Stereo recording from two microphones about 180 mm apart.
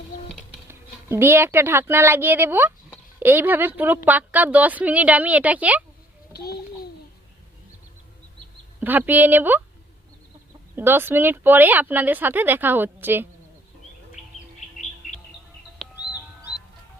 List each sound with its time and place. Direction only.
0.7 s a woman's voice: 15° right (ahead or behind)
6.3 s a child's voice: 60° left (ahead or behind)
8.8 s a woman's voice: 10° right (ahead or behind)
10.8 s a woman's voice: 10° right (ahead or behind)
15.0 s music: 40° left (ahead or behind)
15.8 s bird: centre (ahead or behind)
16.1 s music: 5° right (ahead or behind)